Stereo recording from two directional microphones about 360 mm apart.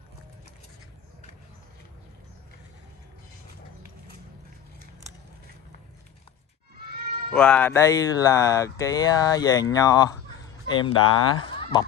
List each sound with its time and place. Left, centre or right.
7.3 s speech: centre
11.0 s speech: left
11.4 s a sound: centre